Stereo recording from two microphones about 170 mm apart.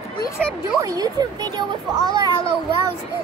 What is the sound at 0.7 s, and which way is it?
A child's voice, 20° right (ahead or behind).